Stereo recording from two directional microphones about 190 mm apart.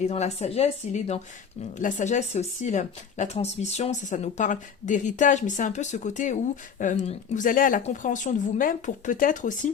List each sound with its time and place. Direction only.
0.1 s speech: 35° left (ahead or behind)